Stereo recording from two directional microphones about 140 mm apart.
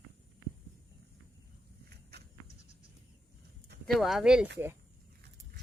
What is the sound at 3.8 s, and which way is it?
Speech, centre (ahead or behind).